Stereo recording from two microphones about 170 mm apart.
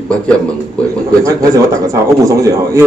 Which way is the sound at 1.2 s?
20° right (ahead or behind).